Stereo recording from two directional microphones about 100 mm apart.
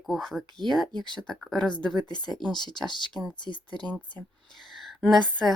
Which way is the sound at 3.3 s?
50° left (ahead or behind).